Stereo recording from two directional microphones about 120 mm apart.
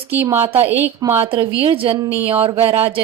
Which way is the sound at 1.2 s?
50° right (ahead or behind).